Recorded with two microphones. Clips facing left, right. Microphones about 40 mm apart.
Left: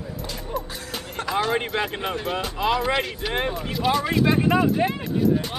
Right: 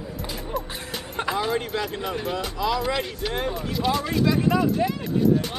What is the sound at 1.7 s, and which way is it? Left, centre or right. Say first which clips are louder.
Speech: left 2 dB; left.